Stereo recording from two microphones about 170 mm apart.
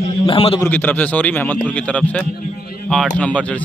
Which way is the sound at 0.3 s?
35° left (ahead or behind).